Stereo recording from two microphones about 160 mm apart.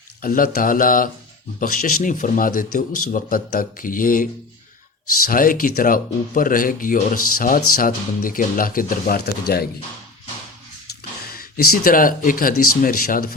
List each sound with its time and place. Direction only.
0.2 s speech: 60° left (ahead or behind)
11.3 s speech: 70° left (ahead or behind)